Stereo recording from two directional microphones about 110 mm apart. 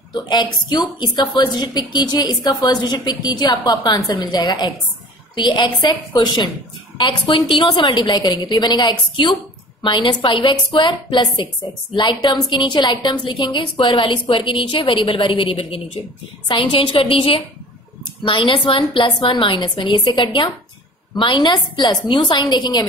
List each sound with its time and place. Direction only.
0.1 s a woman's voice: 40° left (ahead or behind)